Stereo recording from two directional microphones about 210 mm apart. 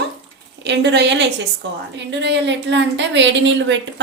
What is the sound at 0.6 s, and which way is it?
A woman's voice, 55° right (ahead or behind).